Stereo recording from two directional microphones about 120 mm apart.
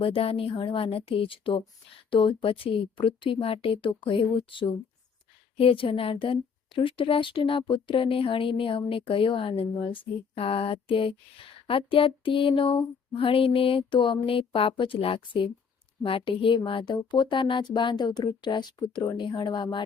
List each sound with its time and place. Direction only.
0.0 s speech: 50° left (ahead or behind)